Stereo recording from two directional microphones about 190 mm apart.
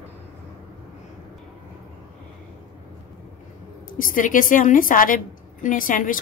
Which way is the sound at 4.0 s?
45° left (ahead or behind).